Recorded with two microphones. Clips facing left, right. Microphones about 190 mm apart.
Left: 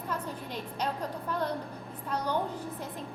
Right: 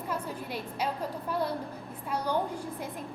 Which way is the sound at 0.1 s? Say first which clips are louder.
Right 1 dB; 10° right (ahead or behind).